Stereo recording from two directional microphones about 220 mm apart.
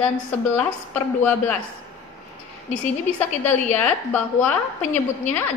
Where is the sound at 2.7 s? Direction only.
5° left (ahead or behind).